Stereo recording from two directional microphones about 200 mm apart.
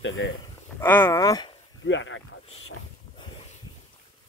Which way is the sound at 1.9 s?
70° left (ahead or behind).